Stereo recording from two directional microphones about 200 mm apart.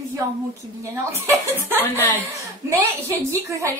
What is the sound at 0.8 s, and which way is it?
A woman's voice, 10° right (ahead or behind).